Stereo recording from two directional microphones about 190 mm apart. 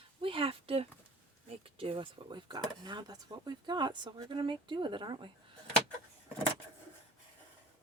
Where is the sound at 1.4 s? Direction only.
30° right (ahead or behind).